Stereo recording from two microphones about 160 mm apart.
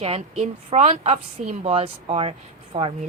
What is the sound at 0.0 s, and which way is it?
A woman's voice, 40° right (ahead or behind).